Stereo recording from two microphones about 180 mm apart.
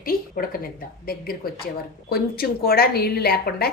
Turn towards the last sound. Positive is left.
turn(degrees=60)  # may be behind; listen again after turning